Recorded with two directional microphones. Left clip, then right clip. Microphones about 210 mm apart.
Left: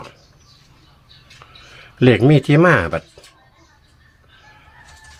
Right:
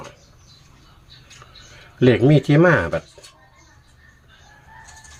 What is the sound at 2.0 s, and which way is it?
Speech, 20° left (ahead or behind).